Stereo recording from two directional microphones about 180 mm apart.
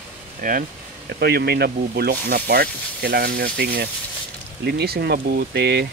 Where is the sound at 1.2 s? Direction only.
65° right (ahead or behind).